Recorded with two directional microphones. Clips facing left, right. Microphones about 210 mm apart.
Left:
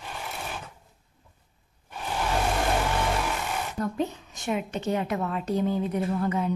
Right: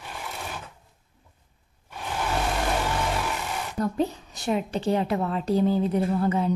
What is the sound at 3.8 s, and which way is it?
A woman's voice, 35° right (ahead or behind).